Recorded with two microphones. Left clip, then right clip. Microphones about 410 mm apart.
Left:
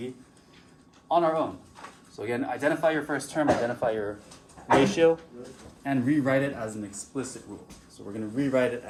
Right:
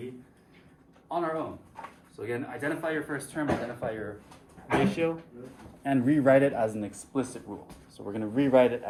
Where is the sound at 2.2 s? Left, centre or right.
Centre.